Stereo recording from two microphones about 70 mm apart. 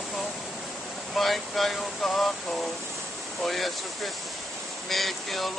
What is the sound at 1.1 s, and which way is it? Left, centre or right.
Speech, centre.